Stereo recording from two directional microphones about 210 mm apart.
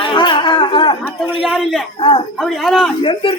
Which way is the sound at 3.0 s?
25° left (ahead or behind).